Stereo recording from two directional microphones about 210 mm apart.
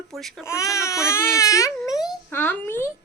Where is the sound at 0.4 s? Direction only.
15° left (ahead or behind).